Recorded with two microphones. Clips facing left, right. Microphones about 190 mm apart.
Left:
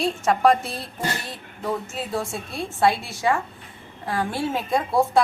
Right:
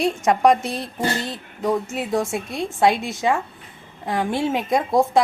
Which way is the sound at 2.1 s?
20° right (ahead or behind).